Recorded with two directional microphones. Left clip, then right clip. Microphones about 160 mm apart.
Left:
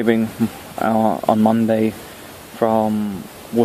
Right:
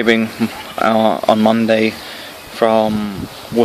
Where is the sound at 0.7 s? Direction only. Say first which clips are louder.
Right 4 dB; 25° right (ahead or behind).